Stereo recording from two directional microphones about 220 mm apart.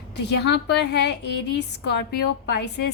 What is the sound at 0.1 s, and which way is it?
A woman's voice, 50° left (ahead or behind).